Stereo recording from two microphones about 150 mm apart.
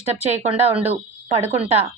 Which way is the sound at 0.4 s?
45° right (ahead or behind).